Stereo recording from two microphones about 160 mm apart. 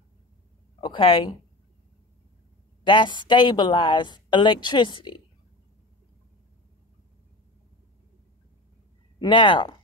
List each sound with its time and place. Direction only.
0.7 s speech: 30° left (ahead or behind)
2.8 s speech: 30° left (ahead or behind)
9.2 s speech: 30° left (ahead or behind)